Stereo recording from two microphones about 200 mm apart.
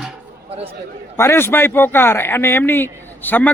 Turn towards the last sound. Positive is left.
turn(degrees=10)  # may be behind; listen again after turning